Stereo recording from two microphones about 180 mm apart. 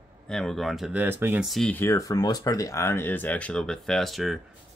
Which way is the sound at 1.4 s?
Centre (ahead or behind).